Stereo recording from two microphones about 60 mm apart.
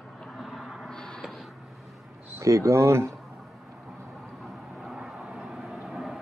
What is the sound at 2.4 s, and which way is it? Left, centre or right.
Speech, right.